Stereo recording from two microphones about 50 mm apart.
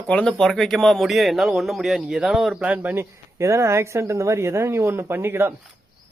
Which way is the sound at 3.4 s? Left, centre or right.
Right.